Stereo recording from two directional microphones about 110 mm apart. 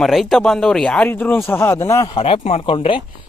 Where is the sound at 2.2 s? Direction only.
55° left (ahead or behind).